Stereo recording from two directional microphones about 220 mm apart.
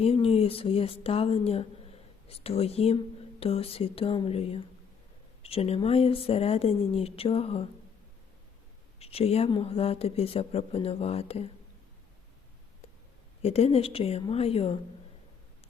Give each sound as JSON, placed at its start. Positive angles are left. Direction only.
{"t": 0.0, "sound": "speech", "side_deg": 25}
{"t": 9.0, "sound": "speech", "side_deg": 25}
{"t": 13.4, "sound": "speech", "side_deg": 30}